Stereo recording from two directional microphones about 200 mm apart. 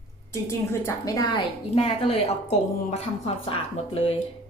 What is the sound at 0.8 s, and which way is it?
A woman's voice, 15° left (ahead or behind).